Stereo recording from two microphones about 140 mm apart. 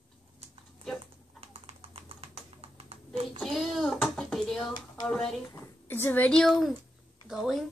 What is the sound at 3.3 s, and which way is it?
A child's voice, centre (ahead or behind).